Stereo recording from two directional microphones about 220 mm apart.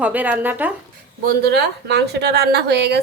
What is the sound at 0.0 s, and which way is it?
Speech, 5° right (ahead or behind).